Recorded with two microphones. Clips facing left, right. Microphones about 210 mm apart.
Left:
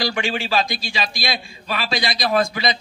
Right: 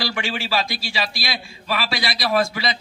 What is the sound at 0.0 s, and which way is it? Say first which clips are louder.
A man's voice: left 3 dB; 15° left (ahead or behind).